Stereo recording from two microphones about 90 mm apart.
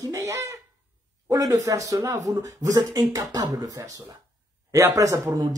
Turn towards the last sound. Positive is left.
turn(degrees=-35)  # may be behind; listen again after turning